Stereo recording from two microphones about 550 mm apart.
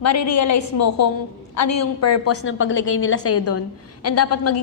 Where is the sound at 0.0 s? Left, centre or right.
Left.